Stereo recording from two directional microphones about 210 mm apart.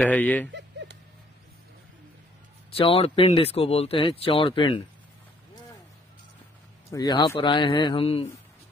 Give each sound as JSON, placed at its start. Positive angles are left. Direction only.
{"t": 0.0, "sound": "speech", "side_deg": 5}
{"t": 0.5, "sound": "a sound", "side_deg": -55}
{"t": 2.8, "sound": "speech", "side_deg": 25}
{"t": 6.9, "sound": "speech", "side_deg": 20}